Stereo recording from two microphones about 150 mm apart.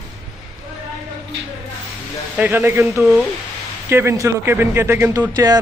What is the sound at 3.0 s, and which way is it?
Speech, 5° right (ahead or behind).